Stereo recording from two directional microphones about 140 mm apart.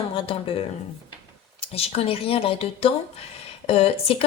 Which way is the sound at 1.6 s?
45° left (ahead or behind).